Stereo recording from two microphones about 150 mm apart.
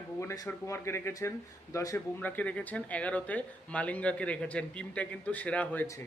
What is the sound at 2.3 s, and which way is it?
A man's voice, 10° left (ahead or behind).